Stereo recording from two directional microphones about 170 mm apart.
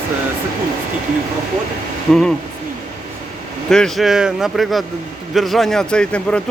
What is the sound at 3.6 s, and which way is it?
A man's voice, 5° left (ahead or behind).